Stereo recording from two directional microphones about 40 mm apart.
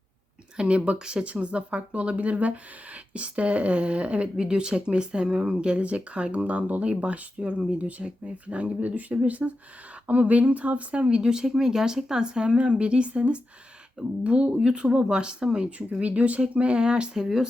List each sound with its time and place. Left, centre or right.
0.5 s speech: right
15.9 s speech: right